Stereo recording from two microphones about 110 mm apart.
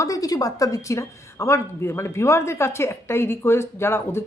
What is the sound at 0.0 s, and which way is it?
Speech, 30° left (ahead or behind).